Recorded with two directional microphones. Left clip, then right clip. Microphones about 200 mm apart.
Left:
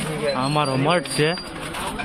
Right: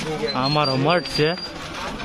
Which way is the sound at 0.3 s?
20° right (ahead or behind).